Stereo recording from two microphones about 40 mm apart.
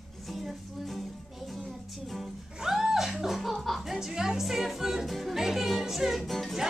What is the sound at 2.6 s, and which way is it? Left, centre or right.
Music, centre.